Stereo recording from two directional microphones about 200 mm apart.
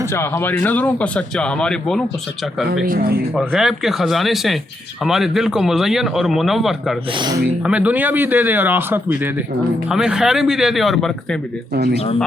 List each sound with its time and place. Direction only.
0.1 s speech: 10° left (ahead or behind)
2.8 s speech: 45° right (ahead or behind)
3.3 s a man's voice: centre (ahead or behind)
7.2 s speech: 20° right (ahead or behind)
7.7 s a man's voice: 5° right (ahead or behind)
11.7 s speech: 50° right (ahead or behind)